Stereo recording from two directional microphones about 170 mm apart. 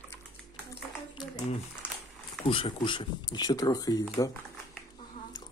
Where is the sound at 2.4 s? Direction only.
30° left (ahead or behind).